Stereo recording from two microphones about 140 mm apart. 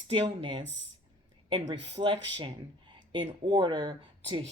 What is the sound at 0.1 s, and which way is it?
Speech, 35° right (ahead or behind).